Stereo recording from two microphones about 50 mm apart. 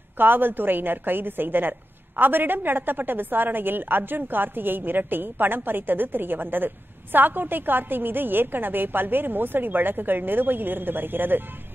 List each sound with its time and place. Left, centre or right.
0.2 s a woman's voice: right